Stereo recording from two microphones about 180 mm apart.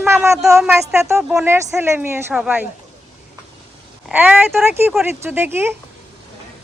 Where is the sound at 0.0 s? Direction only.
15° right (ahead or behind).